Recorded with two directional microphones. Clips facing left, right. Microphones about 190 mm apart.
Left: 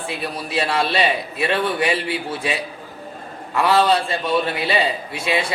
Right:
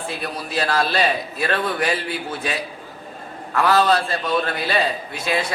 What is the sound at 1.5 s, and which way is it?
Speech, centre (ahead or behind).